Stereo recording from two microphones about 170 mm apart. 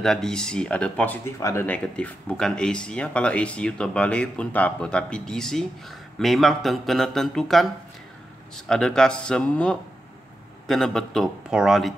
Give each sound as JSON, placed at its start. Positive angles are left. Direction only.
{"t": 0.0, "sound": "speech", "side_deg": 5}